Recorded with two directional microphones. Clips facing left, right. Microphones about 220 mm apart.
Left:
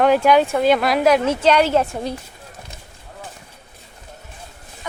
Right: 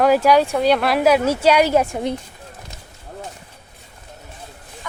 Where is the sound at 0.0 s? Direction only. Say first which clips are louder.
Even; centre (ahead or behind).